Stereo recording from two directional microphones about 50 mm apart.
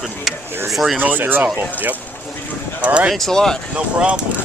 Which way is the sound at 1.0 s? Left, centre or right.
Right.